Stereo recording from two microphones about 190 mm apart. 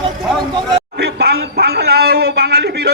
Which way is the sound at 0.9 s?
60° right (ahead or behind).